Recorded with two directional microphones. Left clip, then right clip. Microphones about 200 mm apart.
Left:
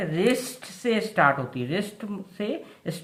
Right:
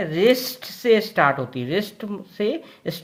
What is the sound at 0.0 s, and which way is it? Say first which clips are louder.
Speech: right 6 dB; 45° right (ahead or behind).